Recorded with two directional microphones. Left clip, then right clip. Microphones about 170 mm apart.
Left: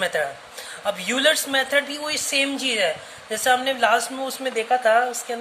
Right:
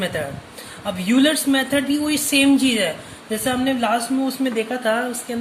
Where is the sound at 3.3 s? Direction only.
30° left (ahead or behind).